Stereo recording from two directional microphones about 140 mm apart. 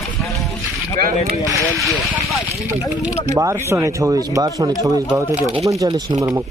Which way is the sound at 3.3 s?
20° right (ahead or behind).